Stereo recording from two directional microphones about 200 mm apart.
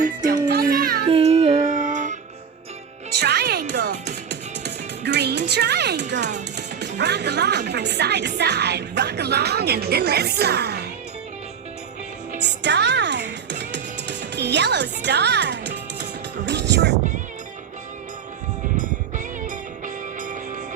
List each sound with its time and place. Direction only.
0.0 s music: 45° right (ahead or behind)
1.0 s a sound: 30° right (ahead or behind)
1.7 s music: 40° right (ahead or behind)
3.2 s music: 55° right (ahead or behind)
6.6 s speech: 60° right (ahead or behind)
12.4 s music: 60° right (ahead or behind)
19.1 s music: 40° right (ahead or behind)